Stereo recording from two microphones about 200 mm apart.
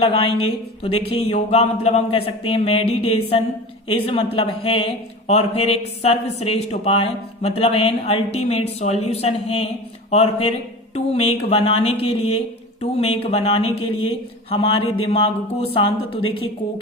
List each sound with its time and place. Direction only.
0.0 s speech: 30° left (ahead or behind)